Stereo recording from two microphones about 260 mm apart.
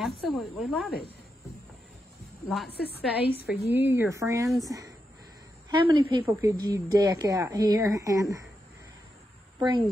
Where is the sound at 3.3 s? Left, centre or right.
Left.